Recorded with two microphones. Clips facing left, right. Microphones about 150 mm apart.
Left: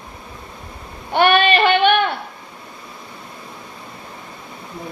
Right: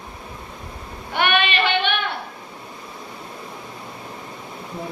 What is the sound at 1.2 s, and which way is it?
Female singing, 35° left (ahead or behind).